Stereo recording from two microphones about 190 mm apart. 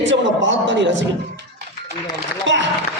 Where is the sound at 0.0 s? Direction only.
75° right (ahead or behind).